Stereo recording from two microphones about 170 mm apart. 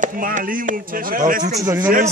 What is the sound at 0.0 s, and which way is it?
Speech, 50° right (ahead or behind).